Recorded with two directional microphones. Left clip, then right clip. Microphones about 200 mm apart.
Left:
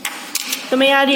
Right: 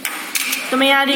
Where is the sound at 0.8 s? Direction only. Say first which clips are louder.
Left 1 dB; 50° left (ahead or behind).